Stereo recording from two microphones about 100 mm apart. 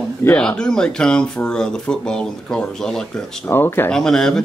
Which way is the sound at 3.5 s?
20° left (ahead or behind).